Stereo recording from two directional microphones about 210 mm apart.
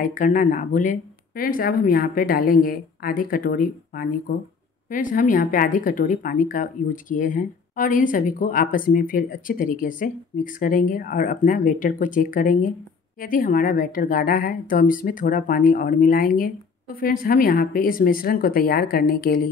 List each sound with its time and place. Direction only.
0.0 s a woman's voice: 40° left (ahead or behind)